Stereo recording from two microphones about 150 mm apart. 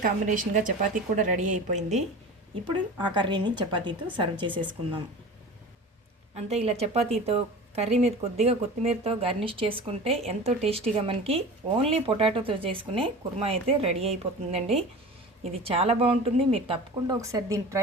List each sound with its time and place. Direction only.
0.0 s a woman's voice: 65° right (ahead or behind)
2.6 s speech: 30° right (ahead or behind)
6.3 s speech: 45° right (ahead or behind)
17.2 s a woman's voice: 20° right (ahead or behind)